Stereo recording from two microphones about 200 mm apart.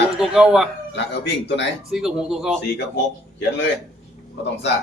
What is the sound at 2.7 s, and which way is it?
Speech, 60° left (ahead or behind).